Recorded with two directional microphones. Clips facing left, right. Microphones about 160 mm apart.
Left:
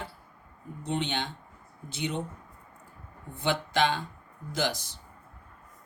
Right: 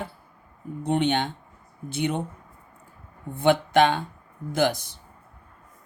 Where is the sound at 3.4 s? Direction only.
55° right (ahead or behind).